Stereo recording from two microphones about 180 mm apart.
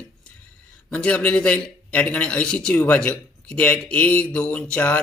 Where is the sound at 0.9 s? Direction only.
5° left (ahead or behind).